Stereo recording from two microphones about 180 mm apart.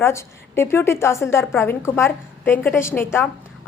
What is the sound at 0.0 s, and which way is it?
A woman's voice, 15° left (ahead or behind).